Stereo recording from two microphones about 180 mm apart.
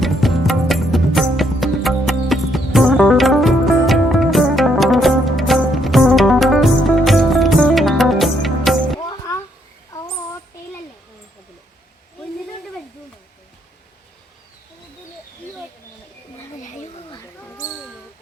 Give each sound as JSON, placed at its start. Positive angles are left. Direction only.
{"t": 0.0, "sound": "music", "side_deg": 0}
{"t": 9.0, "sound": "music", "side_deg": 20}